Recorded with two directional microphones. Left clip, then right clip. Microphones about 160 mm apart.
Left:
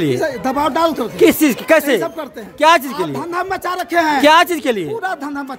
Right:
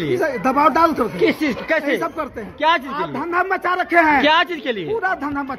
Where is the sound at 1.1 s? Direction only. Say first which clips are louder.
Left 6 dB; 90° left.